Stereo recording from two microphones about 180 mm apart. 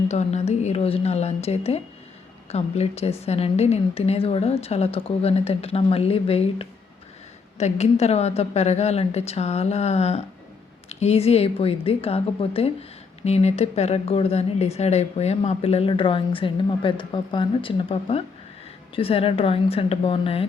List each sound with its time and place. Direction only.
0.1 s a woman's voice: 40° left (ahead or behind)